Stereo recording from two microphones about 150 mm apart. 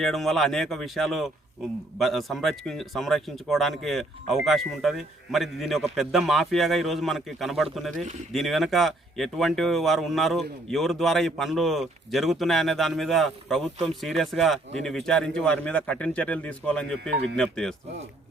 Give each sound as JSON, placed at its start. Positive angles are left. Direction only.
{"t": 0.0, "sound": "speech", "side_deg": 0}